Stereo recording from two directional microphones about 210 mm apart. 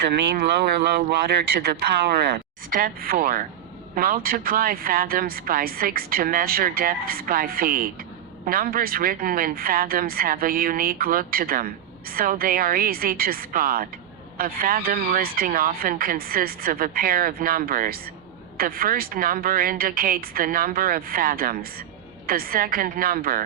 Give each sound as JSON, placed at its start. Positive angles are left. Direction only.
{"t": 0.2, "sound": "speech", "side_deg": -55}